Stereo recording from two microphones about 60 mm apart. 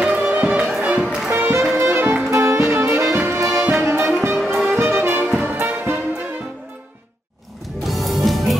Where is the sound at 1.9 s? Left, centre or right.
Right.